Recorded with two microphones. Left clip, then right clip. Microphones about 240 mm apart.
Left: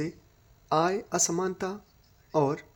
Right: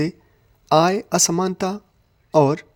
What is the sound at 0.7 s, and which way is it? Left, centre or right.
Speech, right.